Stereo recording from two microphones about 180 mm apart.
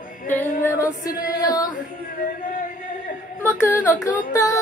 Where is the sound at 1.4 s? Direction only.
20° left (ahead or behind).